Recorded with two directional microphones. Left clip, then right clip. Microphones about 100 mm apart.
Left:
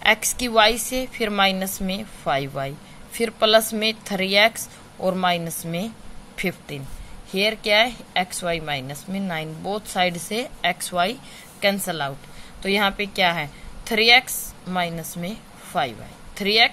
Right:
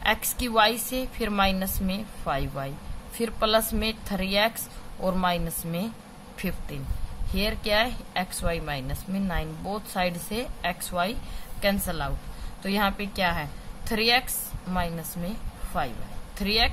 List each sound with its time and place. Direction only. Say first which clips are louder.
0.0 s a woman's voice: left 6 dB; 35° left (ahead or behind)